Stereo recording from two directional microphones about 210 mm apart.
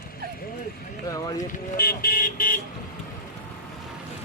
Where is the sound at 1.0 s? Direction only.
15° left (ahead or behind).